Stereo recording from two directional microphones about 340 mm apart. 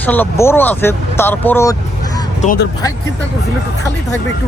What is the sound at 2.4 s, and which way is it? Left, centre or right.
Speech, left.